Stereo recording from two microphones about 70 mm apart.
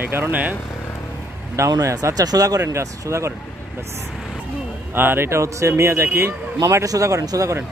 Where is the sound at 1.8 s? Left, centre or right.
Right.